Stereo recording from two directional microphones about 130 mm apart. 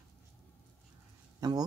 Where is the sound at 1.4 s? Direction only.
30° right (ahead or behind).